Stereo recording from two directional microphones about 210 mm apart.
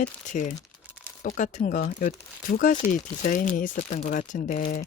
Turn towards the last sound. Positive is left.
turn(degrees=40)  # may be behind; listen again after turning